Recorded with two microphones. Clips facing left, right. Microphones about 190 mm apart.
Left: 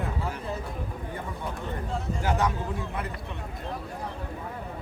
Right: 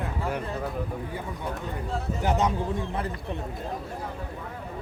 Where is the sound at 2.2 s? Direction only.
20° right (ahead or behind).